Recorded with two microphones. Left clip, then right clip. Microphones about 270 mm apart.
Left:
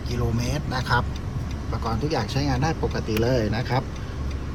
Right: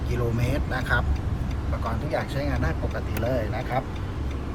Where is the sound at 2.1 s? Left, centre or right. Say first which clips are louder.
Even; centre.